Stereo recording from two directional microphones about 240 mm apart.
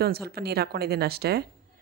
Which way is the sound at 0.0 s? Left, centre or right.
Right.